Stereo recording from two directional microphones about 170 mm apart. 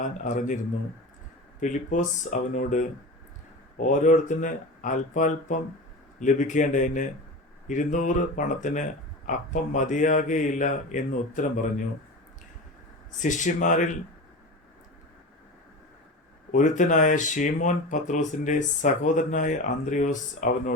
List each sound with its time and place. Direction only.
0.3 s speech: 45° left (ahead or behind)
1.6 s speech: 50° left (ahead or behind)
13.1 s speech: 45° left (ahead or behind)
16.5 s speech: 50° left (ahead or behind)